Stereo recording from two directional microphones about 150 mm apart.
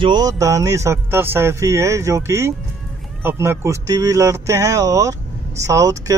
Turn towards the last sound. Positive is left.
turn(degrees=-20)  # may be behind; listen again after turning